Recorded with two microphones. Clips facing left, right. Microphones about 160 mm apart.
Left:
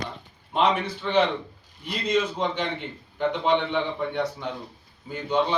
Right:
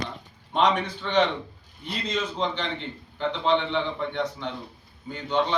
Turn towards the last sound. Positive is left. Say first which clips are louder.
# left 1 dB
turn(degrees=10)  # may be behind; listen again after turning